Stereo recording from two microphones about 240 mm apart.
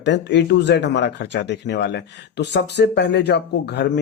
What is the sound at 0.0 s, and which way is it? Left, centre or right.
Speech, left.